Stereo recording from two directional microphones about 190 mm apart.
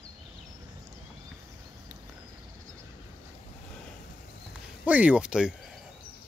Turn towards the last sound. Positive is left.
turn(degrees=-5)  # may be behind; listen again after turning